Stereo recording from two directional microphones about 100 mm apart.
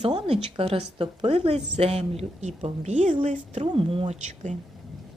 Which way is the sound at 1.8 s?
85° right.